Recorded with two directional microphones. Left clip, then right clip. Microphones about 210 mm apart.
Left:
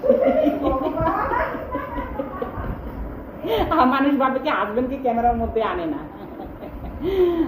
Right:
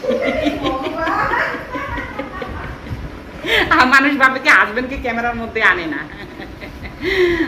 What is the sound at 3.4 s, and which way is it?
A woman's voice, 35° right (ahead or behind).